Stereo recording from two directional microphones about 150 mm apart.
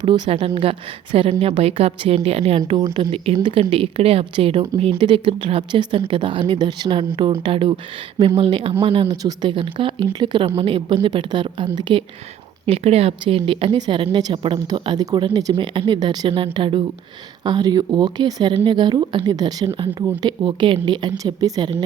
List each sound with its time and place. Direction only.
0.0 s a woman's voice: 35° right (ahead or behind)
12.6 s a woman's voice: 40° right (ahead or behind); by 21.7 s 25° right (ahead or behind)